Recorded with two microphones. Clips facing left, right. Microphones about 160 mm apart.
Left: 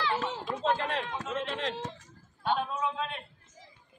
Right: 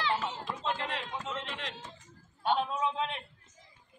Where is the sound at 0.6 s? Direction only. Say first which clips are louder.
Left 7 dB; 55° left (ahead or behind).